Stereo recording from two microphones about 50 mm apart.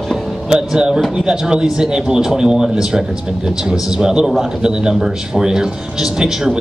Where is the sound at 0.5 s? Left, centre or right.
Centre.